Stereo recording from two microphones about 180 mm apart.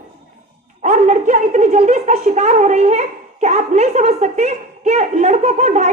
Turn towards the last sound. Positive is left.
turn(degrees=-40)  # may be behind; listen again after turning